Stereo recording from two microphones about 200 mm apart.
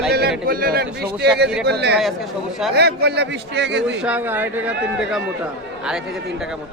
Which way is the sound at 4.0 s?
5° right (ahead or behind).